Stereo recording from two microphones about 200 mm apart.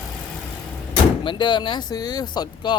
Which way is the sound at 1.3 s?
25° left (ahead or behind).